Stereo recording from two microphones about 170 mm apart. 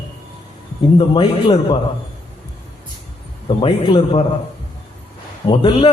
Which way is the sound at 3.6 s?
30° left (ahead or behind).